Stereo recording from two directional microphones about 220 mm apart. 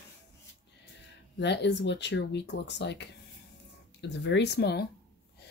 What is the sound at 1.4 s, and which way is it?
Speech, 50° left (ahead or behind).